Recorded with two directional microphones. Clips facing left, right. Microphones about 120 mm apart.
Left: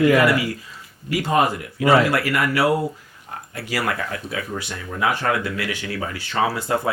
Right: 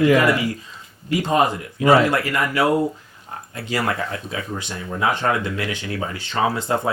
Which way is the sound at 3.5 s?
25° right (ahead or behind).